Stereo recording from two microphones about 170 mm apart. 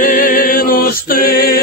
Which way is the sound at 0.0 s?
50° left (ahead or behind).